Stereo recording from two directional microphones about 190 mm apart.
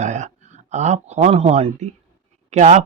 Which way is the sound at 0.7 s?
40° right (ahead or behind).